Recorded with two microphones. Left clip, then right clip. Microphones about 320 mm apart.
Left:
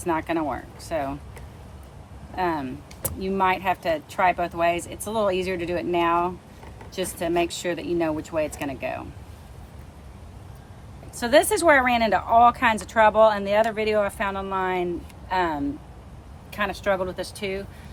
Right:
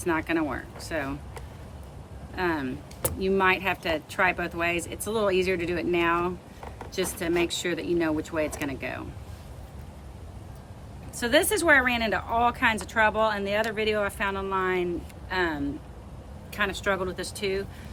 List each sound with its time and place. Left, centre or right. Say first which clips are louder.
0.0 s speech: left 2 dB; centre
2.3 s speech: left 3 dB; centre
11.2 s speech: left 4 dB; centre